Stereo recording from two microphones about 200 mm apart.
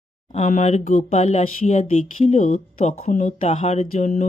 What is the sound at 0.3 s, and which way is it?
Speech, 40° left (ahead or behind).